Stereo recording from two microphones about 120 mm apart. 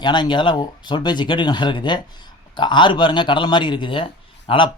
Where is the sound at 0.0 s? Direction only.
40° left (ahead or behind).